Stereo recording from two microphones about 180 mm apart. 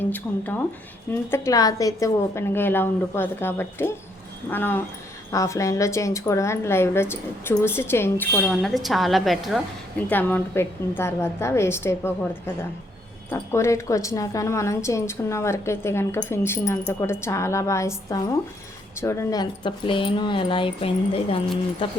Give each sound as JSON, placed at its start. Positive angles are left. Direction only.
{"t": 0.0, "sound": "a woman's voice", "side_deg": 10}
{"t": 10.1, "sound": "a woman's voice", "side_deg": 10}